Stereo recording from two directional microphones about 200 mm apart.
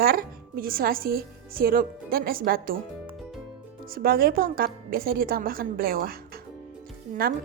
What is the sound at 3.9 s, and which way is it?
A woman's voice, 50° right (ahead or behind).